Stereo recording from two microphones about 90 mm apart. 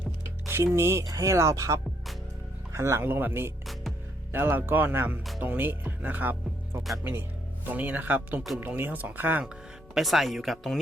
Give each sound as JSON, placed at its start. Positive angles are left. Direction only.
{"t": 0.4, "sound": "speech", "side_deg": -25}
{"t": 3.1, "sound": "speech", "side_deg": -20}
{"t": 9.9, "sound": "speech", "side_deg": 0}